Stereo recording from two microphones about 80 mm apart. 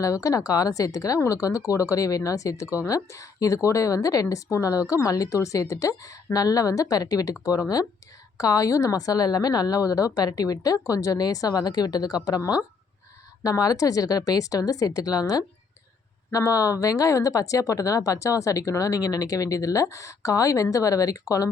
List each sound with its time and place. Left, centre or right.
0.0 s speech: left
8.4 s speech: left
13.4 s speech: left